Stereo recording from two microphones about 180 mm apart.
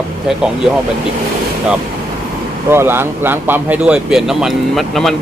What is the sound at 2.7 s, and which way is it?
Speech, 15° right (ahead or behind).